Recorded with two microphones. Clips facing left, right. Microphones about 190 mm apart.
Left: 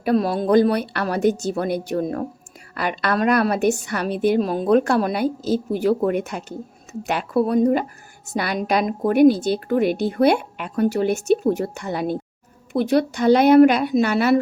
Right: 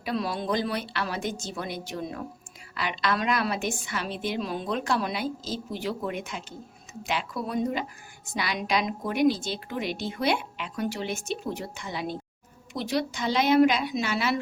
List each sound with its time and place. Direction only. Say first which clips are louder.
0.0 s a woman's voice: left 10 dB; 50° left (ahead or behind)
7.4 s a woman's voice: left 10 dB; 40° left (ahead or behind)